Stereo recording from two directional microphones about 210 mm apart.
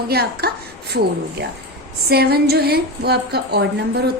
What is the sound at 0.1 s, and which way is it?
Speech, 50° right (ahead or behind).